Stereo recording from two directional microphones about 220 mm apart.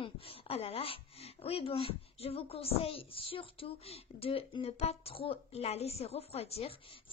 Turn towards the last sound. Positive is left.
turn(degrees=25)  # may be behind; listen again after turning